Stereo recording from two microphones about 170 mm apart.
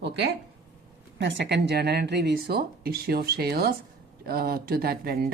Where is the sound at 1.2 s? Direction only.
90° right.